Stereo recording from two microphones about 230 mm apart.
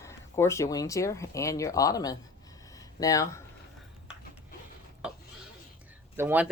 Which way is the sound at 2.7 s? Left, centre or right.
Centre.